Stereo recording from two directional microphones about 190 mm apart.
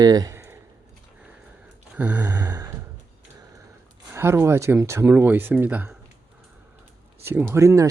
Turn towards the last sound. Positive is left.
turn(degrees=-15)  # may be behind; listen again after turning